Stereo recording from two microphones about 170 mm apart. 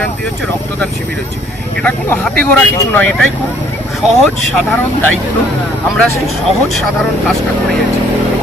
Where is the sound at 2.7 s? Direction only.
15° left (ahead or behind).